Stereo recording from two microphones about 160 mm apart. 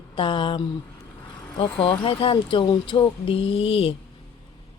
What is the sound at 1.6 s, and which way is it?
Speech, 35° left (ahead or behind).